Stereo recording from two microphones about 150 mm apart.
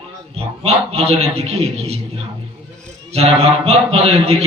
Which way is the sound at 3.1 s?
45° right (ahead or behind).